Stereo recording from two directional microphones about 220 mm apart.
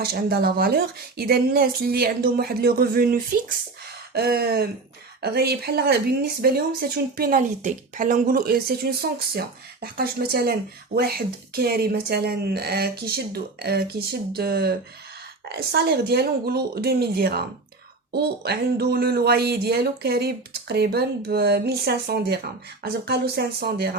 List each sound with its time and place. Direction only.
0.0 s speech: 45° right (ahead or behind)